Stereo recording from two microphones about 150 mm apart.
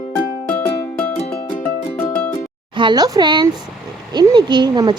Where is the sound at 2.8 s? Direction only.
30° right (ahead or behind).